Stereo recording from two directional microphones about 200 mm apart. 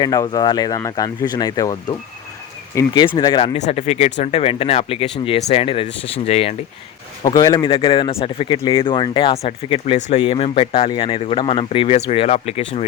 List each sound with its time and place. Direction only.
0.0 s a man's voice: 20° left (ahead or behind)
7.3 s a man's voice: 20° left (ahead or behind)